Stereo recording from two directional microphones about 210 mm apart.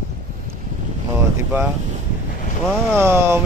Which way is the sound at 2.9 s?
10° right (ahead or behind).